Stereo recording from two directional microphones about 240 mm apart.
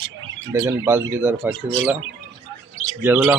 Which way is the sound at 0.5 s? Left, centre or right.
Centre.